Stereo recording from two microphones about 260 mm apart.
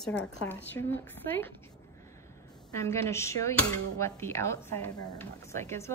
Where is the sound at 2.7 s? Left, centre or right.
Centre.